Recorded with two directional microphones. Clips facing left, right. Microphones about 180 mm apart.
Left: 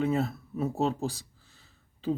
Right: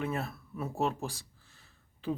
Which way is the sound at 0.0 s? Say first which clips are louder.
Left 7 dB; 20° left (ahead or behind).